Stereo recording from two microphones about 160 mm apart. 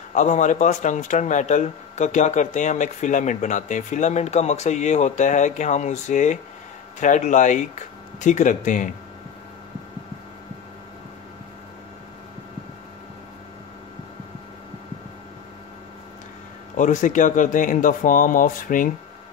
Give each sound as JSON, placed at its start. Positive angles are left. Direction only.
{"t": 0.1, "sound": "speech", "side_deg": 50}
{"t": 16.7, "sound": "speech", "side_deg": 50}